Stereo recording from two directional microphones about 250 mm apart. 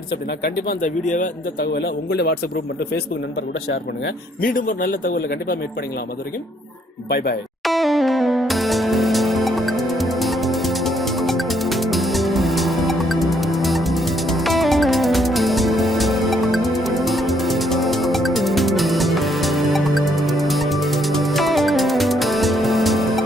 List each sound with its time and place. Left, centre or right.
0.4 s a man's voice: left
3.7 s a man's voice: left
7.6 s music: centre